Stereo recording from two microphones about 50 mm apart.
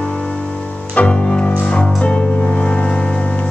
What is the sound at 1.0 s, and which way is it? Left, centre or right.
Music, left.